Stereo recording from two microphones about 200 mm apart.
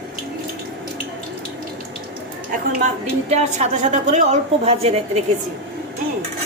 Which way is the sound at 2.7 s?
35° right (ahead or behind).